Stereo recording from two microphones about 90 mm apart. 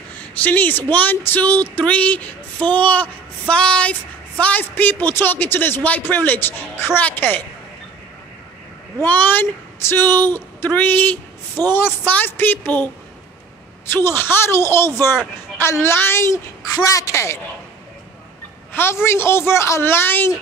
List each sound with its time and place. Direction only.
0.4 s speech: 20° left (ahead or behind)
9.0 s a man's voice: 20° left (ahead or behind)
16.7 s a woman's voice: 40° left (ahead or behind)
18.7 s a woman's voice: 25° left (ahead or behind)